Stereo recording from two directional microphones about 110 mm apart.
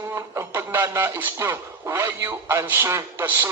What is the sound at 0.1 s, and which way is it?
A man's voice, 20° right (ahead or behind).